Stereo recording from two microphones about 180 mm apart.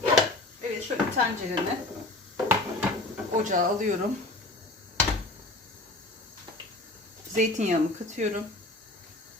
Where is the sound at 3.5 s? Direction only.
45° right (ahead or behind).